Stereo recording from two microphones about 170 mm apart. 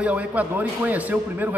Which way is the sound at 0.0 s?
10° right (ahead or behind).